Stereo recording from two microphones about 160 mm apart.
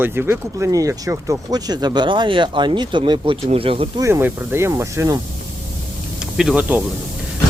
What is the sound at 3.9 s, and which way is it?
Speech, 20° right (ahead or behind).